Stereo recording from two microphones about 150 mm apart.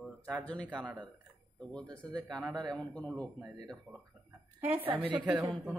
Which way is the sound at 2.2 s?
Centre (ahead or behind).